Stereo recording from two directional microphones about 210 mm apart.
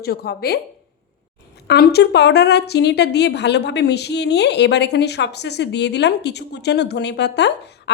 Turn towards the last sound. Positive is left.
turn(degrees=55)  # may be behind; listen again after turning